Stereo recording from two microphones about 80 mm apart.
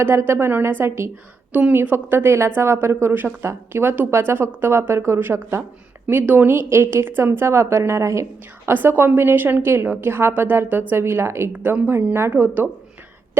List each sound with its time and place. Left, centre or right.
0.0 s a woman's voice: right
1.5 s a woman's voice: right
8.7 s a woman's voice: right
11.5 s a woman's voice: right